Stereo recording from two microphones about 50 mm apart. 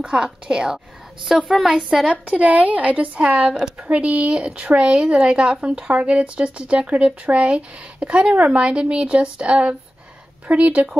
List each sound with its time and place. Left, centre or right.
0.0 s a woman's voice: centre
2.2 s speech: right